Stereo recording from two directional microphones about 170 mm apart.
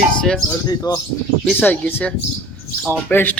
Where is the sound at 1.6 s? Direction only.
10° left (ahead or behind).